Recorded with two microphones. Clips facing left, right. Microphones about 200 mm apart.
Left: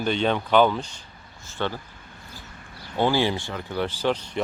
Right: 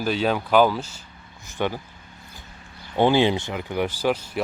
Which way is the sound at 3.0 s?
20° right (ahead or behind).